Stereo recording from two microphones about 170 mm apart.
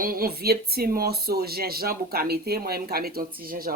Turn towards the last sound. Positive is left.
turn(degrees=-60)  # may be behind; listen again after turning